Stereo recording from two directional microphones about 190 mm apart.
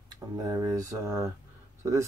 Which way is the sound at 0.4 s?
15° right (ahead or behind).